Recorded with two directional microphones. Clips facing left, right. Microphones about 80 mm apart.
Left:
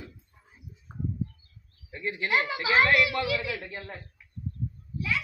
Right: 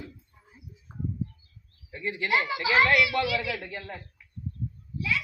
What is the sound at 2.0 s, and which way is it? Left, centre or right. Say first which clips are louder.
A woman's voice: right 1 dB; left.